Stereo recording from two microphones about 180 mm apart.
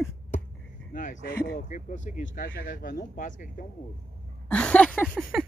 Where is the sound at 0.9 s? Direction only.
45° left (ahead or behind).